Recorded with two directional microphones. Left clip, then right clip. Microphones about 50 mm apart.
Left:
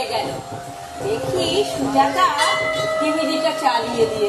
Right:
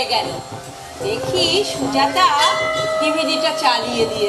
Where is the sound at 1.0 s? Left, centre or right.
Centre.